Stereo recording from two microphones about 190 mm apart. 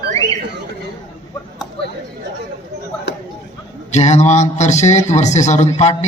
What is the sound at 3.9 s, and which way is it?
A man's voice, 35° left (ahead or behind).